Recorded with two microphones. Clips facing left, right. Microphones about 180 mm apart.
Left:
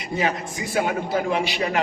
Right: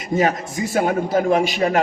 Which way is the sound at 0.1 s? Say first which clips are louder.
Right 6 dB; 45° right (ahead or behind).